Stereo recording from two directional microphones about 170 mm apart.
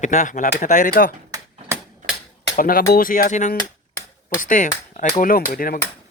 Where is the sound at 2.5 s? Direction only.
55° left (ahead or behind).